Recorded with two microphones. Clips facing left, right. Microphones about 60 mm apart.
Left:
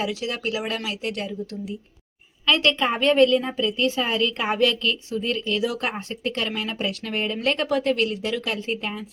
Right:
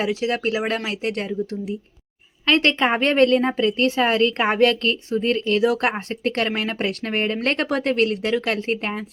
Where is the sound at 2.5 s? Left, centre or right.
Right.